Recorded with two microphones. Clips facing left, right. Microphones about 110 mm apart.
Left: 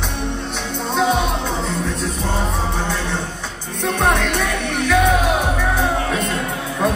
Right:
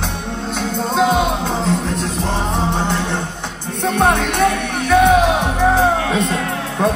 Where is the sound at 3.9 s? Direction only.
60° right (ahead or behind).